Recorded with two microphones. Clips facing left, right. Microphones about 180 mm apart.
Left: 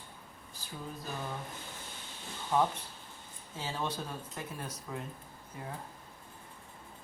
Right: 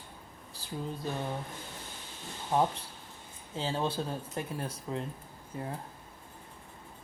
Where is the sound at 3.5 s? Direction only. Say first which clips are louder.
Right 5 dB; 30° right (ahead or behind).